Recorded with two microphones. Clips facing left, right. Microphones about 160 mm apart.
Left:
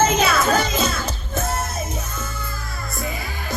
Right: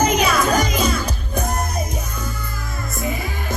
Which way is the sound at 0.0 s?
15° right (ahead or behind).